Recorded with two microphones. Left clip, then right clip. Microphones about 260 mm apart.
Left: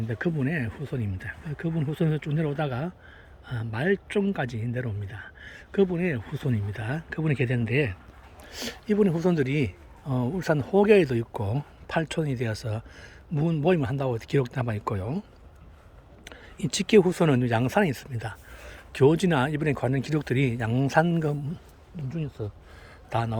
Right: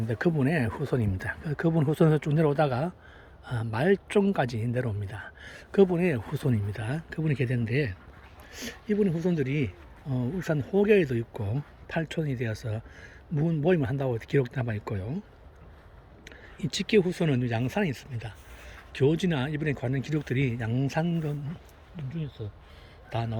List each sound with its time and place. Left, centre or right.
0.1 s speech: centre
16.2 s speech: centre